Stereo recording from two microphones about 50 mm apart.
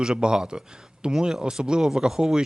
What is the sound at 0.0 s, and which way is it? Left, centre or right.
Speech, centre.